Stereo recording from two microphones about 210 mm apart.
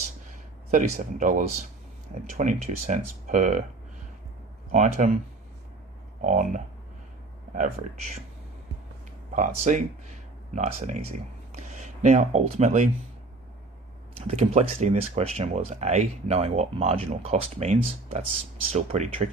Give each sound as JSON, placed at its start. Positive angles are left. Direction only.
{"t": 0.7, "sound": "speech", "side_deg": -35}
{"t": 4.7, "sound": "speech", "side_deg": -35}
{"t": 6.2, "sound": "speech", "side_deg": -35}
{"t": 9.3, "sound": "speech", "side_deg": -35}
{"t": 14.2, "sound": "speech", "side_deg": -30}